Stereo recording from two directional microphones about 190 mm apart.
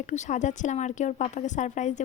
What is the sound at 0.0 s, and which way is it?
A woman's voice, 40° left (ahead or behind).